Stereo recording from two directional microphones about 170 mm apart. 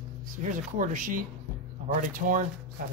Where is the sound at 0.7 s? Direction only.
50° right (ahead or behind).